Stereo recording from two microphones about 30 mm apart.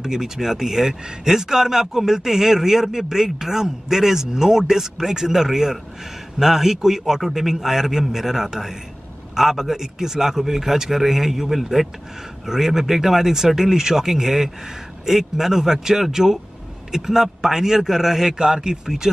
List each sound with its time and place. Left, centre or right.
0.0 s speech: centre
18.4 s speech: right